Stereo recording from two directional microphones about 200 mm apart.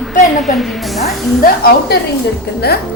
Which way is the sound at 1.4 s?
50° left (ahead or behind).